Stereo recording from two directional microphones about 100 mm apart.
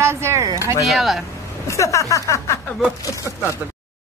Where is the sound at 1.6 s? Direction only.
30° left (ahead or behind).